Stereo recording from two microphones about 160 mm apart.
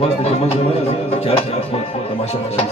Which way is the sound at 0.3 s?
40° left (ahead or behind).